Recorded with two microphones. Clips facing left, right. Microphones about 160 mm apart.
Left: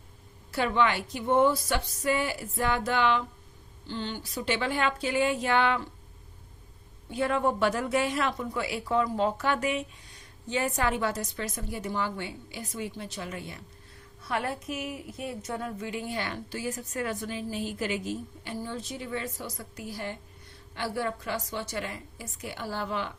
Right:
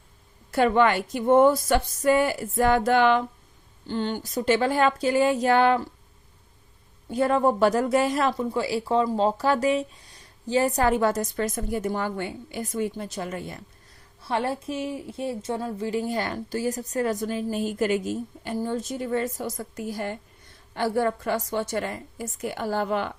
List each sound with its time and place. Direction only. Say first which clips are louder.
0.5 s a woman's voice: right 6 dB; 50° right (ahead or behind)
7.1 s a woman's voice: right 5 dB; 40° right (ahead or behind)
14.2 s a woman's voice: right 5 dB; 30° right (ahead or behind); by 23.1 s 55° right (ahead or behind)